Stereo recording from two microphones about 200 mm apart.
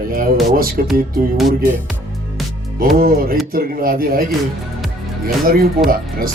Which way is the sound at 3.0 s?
45° right (ahead or behind).